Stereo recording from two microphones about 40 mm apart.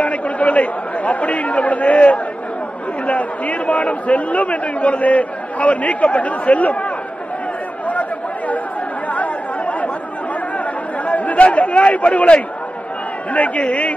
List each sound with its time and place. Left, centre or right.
0.0 s a man's voice: left
7.9 s chatter: left
11.1 s a man's voice: left